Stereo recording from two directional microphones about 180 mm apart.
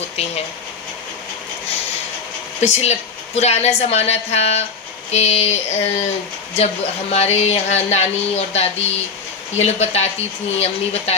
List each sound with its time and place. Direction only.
2.6 s a woman's voice: 40° left (ahead or behind)